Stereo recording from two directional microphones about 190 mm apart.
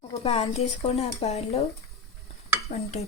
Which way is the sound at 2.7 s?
35° left (ahead or behind).